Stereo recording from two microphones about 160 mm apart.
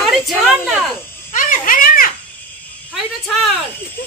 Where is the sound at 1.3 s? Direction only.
60° left (ahead or behind).